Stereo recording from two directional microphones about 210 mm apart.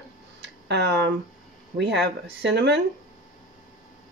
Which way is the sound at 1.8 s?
55° right (ahead or behind).